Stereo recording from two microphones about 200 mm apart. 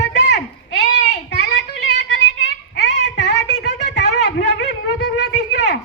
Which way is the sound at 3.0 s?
60° left (ahead or behind).